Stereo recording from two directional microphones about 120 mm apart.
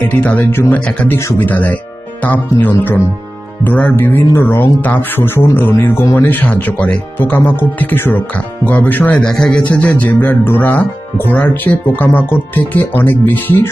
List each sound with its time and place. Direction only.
0.2 s a man's voice: 15° left (ahead or behind)